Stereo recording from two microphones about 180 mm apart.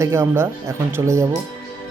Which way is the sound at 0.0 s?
15° right (ahead or behind).